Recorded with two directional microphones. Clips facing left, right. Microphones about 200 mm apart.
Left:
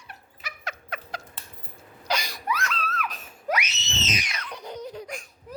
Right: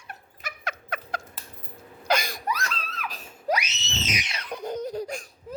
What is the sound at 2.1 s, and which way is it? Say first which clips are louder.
Gasp: right 3 dB; 50° right (ahead or behind).